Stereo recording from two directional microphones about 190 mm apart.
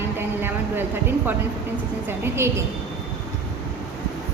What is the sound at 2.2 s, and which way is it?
Speech, 15° right (ahead or behind).